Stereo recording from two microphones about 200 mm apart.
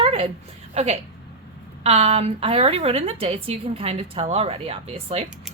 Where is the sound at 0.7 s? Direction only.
35° right (ahead or behind).